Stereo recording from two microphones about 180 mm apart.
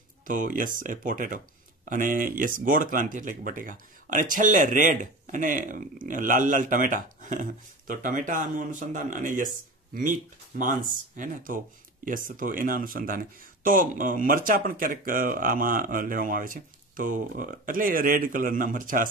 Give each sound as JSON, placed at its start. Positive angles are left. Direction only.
{"t": 0.3, "sound": "speech", "side_deg": -45}
{"t": 10.5, "sound": "speech", "side_deg": -45}